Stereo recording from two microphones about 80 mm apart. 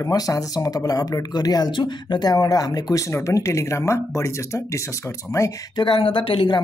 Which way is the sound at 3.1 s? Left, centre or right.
Left.